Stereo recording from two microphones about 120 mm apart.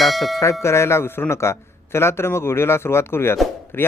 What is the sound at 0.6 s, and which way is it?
A man's voice, 20° left (ahead or behind).